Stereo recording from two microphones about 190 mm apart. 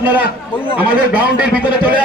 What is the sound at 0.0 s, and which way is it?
A man's voice, 10° right (ahead or behind).